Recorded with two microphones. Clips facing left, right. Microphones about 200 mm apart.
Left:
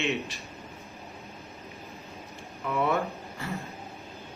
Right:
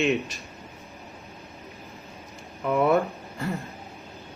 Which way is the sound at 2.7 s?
45° right (ahead or behind).